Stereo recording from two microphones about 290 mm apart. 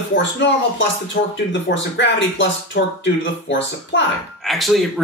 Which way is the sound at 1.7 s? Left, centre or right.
Left.